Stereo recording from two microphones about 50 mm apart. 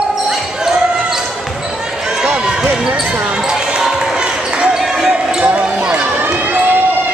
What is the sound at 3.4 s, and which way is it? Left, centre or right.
Basketball bounce, centre.